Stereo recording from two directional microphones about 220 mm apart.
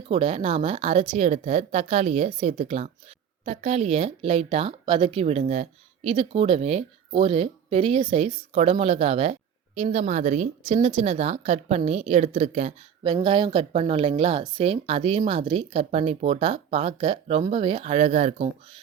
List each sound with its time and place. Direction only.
0.1 s speech: 25° right (ahead or behind)